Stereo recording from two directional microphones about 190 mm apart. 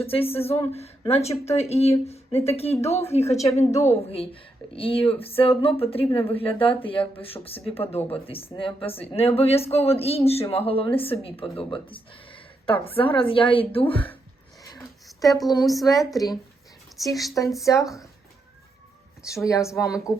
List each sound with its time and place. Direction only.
0.0 s a woman's voice: 30° left (ahead or behind)
14.7 s a sound: 20° left (ahead or behind)
15.3 s a woman's voice: centre (ahead or behind)
16.1 s a woman's voice: 20° left (ahead or behind)
17.1 s a woman's voice: centre (ahead or behind)
19.3 s a woman's voice: 15° left (ahead or behind)
20.1 s a woman's voice: 5° right (ahead or behind)